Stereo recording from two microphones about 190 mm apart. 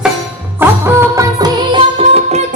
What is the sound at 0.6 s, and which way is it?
Music, 15° right (ahead or behind).